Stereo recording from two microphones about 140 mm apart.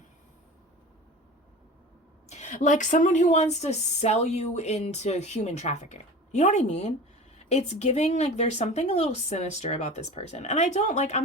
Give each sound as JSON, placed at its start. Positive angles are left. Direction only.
{"t": 2.3, "sound": "a woman's voice", "side_deg": 55}